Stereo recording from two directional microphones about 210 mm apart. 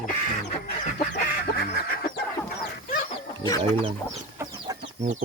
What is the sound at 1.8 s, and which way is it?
Vehicle, 45° left (ahead or behind).